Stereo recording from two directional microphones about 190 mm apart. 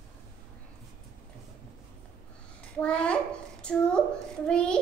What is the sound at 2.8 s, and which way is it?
A child's voice, 5° left (ahead or behind).